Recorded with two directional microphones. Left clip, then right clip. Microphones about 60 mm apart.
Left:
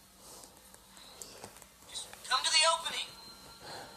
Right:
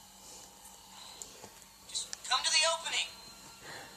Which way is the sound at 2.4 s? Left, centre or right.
Left.